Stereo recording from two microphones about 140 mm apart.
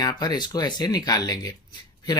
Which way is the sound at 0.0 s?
30° left (ahead or behind).